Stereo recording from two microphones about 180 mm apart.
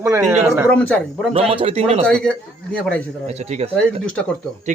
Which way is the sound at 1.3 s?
30° right (ahead or behind).